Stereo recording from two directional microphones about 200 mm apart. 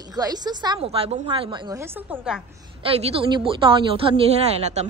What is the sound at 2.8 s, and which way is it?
A woman's voice, 30° right (ahead or behind).